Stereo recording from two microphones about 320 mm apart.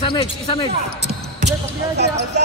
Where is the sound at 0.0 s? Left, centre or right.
Centre.